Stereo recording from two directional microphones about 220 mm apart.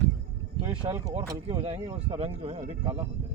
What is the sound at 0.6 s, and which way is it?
Speech, 25° right (ahead or behind).